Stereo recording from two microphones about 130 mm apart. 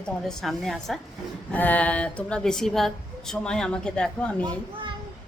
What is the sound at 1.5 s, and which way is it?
A woman's voice, 10° left (ahead or behind).